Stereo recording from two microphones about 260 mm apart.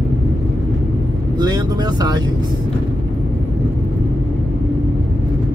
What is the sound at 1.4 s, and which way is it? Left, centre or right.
Speech, centre.